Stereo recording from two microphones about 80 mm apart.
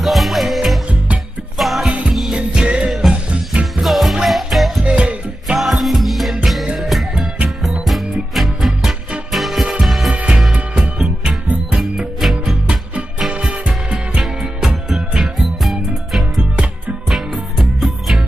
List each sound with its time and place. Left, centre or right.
0.0 s music: centre
0.8 s music: centre
1.6 s music: centre
1.9 s music: centre
3.3 s music: centre
3.8 s music: centre
4.8 s music: centre
5.5 s music: centre
10.1 s music: centre
10.8 s music: centre
11.4 s music: centre
12.2 s music: centre
13.3 s music: centre